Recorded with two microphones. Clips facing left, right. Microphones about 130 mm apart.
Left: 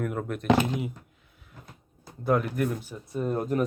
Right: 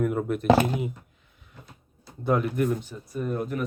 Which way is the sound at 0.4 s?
35° right (ahead or behind).